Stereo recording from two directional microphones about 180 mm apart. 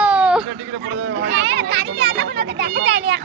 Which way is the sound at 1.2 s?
85° right.